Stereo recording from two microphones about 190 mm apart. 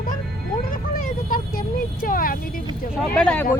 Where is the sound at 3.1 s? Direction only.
5° left (ahead or behind).